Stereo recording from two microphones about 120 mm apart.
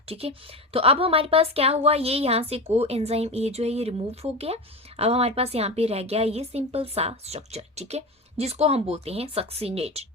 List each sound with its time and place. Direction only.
0.1 s speech: 55° right (ahead or behind)